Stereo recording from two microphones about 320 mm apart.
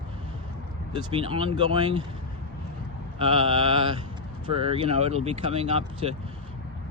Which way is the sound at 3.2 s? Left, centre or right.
Centre.